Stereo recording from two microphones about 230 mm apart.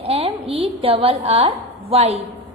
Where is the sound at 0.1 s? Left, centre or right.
Right.